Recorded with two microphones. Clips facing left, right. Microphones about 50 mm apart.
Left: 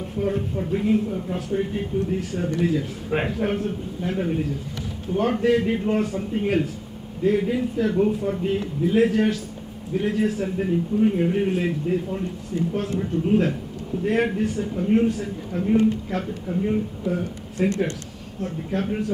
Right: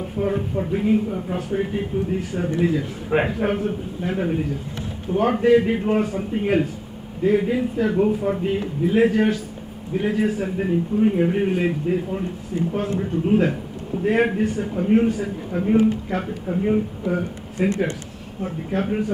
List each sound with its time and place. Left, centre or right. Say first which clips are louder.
0.6 s a man's voice: right 2 dB; centre
16.2 s a man's voice: right 1 dB; centre